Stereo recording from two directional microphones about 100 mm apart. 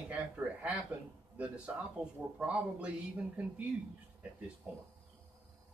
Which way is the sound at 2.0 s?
10° right (ahead or behind).